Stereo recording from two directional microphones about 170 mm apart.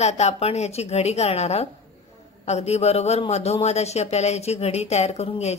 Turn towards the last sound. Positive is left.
turn(degrees=40)  # may be behind; listen again after turning